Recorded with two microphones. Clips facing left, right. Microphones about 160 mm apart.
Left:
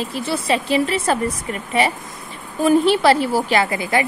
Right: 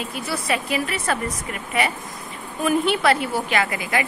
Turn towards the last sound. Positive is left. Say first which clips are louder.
# left 4 dB
turn(degrees=30)  # may be behind; listen again after turning